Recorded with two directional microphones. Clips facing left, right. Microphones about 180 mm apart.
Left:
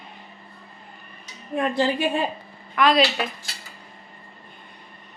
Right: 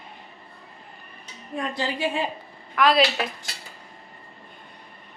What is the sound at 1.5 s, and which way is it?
Speech, 55° left (ahead or behind).